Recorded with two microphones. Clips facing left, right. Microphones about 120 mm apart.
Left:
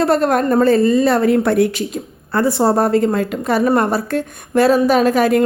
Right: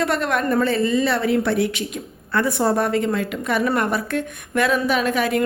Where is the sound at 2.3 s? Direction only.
30° left (ahead or behind).